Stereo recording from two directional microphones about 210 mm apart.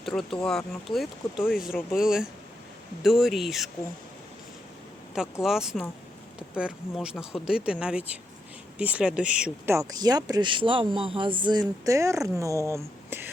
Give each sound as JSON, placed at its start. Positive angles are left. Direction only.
{"t": 0.0, "sound": "speech", "side_deg": 0}
{"t": 5.1, "sound": "speech", "side_deg": 0}